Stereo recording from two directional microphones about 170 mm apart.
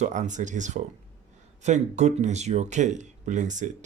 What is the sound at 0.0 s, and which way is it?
Speech, 45° right (ahead or behind).